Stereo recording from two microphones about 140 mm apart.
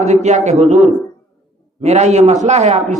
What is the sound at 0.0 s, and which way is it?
A man's voice, 55° right (ahead or behind).